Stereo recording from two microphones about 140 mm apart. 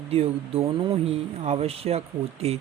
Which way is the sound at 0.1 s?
45° right (ahead or behind).